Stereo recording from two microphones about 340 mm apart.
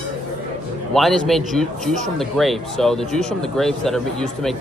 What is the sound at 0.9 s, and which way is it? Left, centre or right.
Speech, centre.